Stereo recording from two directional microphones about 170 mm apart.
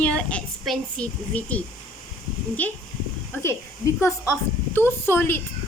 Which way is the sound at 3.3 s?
15° left (ahead or behind).